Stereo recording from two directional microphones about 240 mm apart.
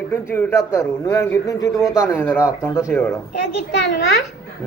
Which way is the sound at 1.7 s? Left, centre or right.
Centre.